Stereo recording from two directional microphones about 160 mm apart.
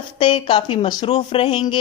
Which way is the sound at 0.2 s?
30° left (ahead or behind).